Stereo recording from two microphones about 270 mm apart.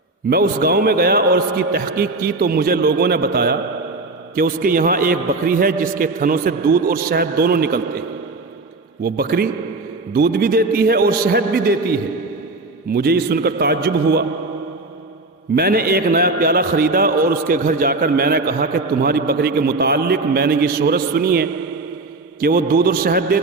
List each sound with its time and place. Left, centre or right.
0.3 s a man's voice: right
9.0 s a man's voice: right
15.5 s a man's voice: right